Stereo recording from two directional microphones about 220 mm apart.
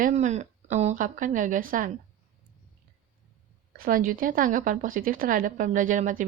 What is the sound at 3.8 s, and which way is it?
A woman's voice, 40° right (ahead or behind).